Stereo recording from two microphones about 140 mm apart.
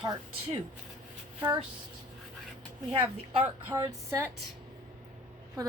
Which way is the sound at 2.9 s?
45° right (ahead or behind).